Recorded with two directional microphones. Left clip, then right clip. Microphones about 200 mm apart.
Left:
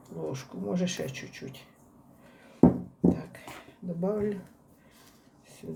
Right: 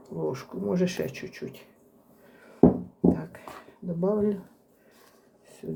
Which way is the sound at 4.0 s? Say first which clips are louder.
Right 4 dB; 10° right (ahead or behind).